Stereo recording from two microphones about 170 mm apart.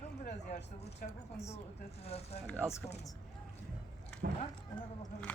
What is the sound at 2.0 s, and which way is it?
Speech, 35° left (ahead or behind).